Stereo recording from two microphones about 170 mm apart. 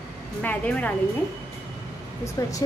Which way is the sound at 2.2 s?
20° left (ahead or behind).